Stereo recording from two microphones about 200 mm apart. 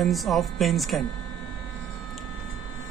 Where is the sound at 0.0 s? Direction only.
Centre (ahead or behind).